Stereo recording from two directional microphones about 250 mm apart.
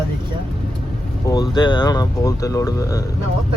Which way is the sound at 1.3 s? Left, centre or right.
Centre.